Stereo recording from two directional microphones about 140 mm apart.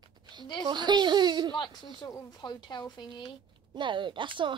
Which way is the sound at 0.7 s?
30° right (ahead or behind).